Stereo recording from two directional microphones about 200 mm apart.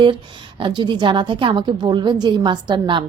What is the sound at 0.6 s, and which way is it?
A woman's voice, 25° right (ahead or behind).